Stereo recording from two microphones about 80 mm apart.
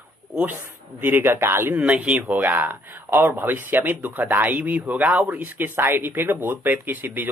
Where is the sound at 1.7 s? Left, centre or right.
Centre.